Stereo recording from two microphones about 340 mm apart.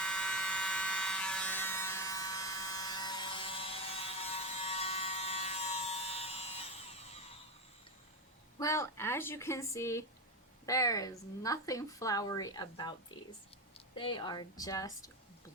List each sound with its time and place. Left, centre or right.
0.0 s electric shaver: centre
8.5 s a woman's voice: centre